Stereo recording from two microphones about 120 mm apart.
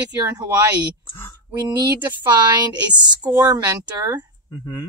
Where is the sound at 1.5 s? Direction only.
35° right (ahead or behind).